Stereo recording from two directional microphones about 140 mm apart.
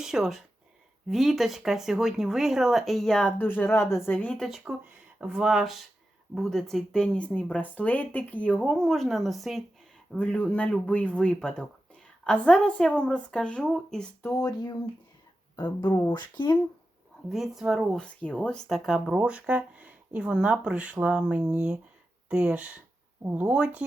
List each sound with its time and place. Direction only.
0.0 s speech: 5° right (ahead or behind)
4.4 s a woman's voice: centre (ahead or behind)
14.2 s speech: 20° left (ahead or behind)
17.2 s speech: centre (ahead or behind)
18.2 s speech: 10° left (ahead or behind); by 23.8 s 10° right (ahead or behind)